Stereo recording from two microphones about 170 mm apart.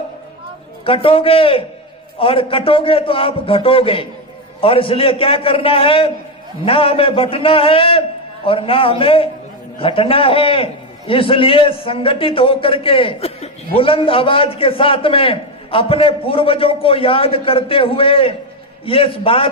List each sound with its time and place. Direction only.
0.9 s a man's voice: 35° left (ahead or behind)